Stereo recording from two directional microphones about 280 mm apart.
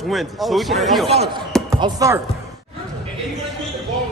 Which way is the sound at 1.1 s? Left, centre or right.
Right.